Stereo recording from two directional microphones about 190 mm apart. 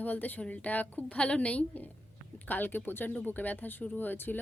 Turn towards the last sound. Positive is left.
turn(degrees=10)  # may be behind; listen again after turning